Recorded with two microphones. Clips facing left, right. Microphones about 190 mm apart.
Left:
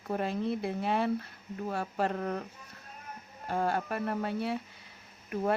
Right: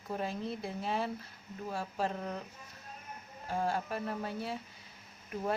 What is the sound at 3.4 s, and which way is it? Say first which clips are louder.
Speech: left 3 dB; 60° left (ahead or behind).